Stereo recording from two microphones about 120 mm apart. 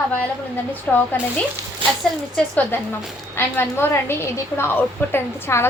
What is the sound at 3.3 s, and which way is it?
A woman's voice, 20° left (ahead or behind).